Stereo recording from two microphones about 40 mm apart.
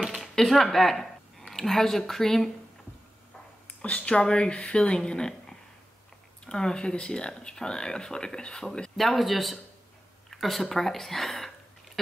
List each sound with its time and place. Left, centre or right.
0.0 s a sound: centre
0.4 s speech: centre
3.8 s speech: left; by 8.9 s centre
8.9 s a man's voice: centre